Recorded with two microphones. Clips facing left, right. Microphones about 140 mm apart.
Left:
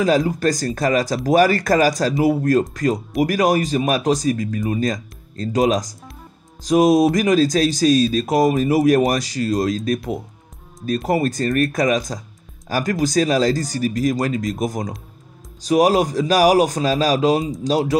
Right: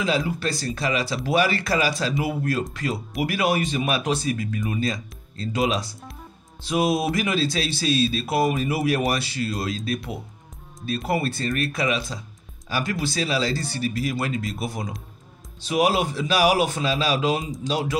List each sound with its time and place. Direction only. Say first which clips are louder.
0.0 s speech: left 7 dB; 40° left (ahead or behind)
11.1 s speech: left 5 dB; 40° left (ahead or behind)